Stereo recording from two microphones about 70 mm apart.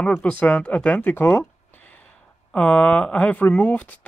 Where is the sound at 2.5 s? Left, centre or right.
Left.